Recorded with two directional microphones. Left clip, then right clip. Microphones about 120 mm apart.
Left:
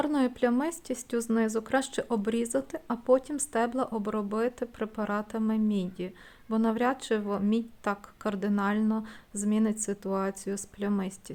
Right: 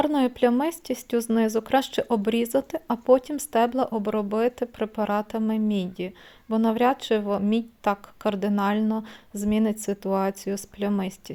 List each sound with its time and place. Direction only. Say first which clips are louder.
0.0 s speech: right 6 dB; 25° right (ahead or behind)